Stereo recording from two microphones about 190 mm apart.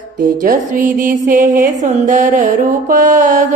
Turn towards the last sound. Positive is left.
turn(degrees=-40)  # may be behind; listen again after turning